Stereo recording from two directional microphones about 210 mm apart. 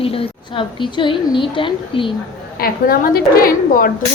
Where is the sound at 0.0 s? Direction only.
25° left (ahead or behind).